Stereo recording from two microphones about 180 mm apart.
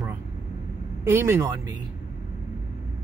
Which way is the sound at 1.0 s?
15° right (ahead or behind).